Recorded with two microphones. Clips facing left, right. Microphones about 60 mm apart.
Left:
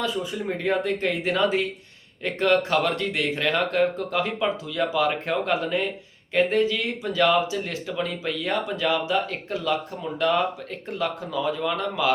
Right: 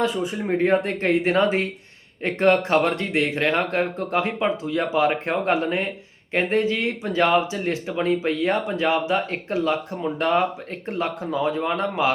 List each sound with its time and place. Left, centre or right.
0.0 s speech: right